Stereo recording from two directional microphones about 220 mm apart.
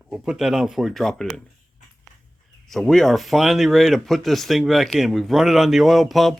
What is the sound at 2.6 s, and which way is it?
Speech, centre (ahead or behind).